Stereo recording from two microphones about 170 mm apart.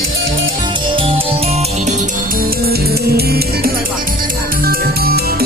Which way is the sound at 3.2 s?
70° right (ahead or behind).